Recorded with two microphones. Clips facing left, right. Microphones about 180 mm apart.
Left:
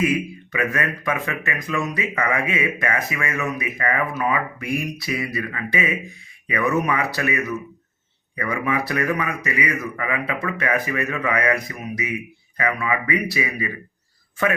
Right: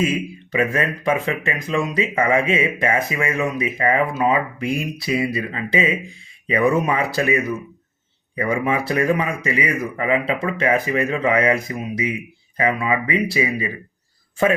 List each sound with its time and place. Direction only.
0.0 s speech: 25° right (ahead or behind)